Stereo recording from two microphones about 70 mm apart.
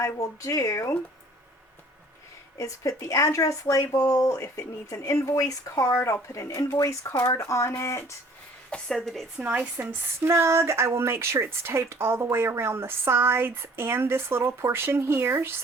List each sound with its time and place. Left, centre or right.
0.0 s speech: left
2.6 s speech: left
8.7 s a woman's voice: centre
9.4 s speech: right
10.2 s speech: right